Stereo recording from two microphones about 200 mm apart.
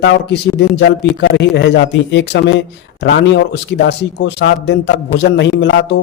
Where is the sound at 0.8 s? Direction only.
60° left (ahead or behind).